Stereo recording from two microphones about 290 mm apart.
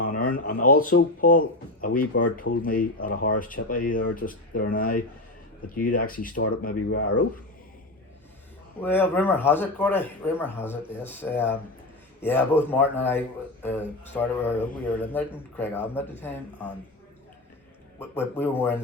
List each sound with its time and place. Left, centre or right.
0.0 s speech: left
8.8 s a man's voice: centre
18.0 s a man's voice: centre